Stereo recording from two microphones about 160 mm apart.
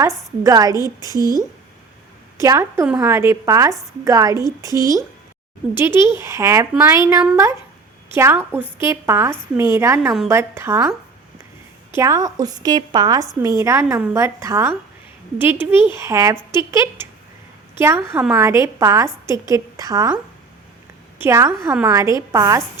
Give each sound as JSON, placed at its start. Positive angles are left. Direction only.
{"t": 0.4, "sound": "a woman's voice", "side_deg": -20}
{"t": 2.4, "sound": "a woman's voice", "side_deg": -20}
{"t": 11.9, "sound": "a woman's voice", "side_deg": -20}
{"t": 21.2, "sound": "a woman's voice", "side_deg": -15}